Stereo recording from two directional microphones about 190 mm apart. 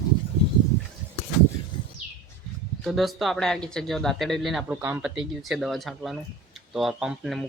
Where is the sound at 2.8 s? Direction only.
Centre (ahead or behind).